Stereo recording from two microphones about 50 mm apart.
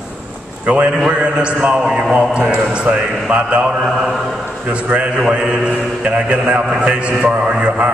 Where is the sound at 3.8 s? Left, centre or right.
Centre.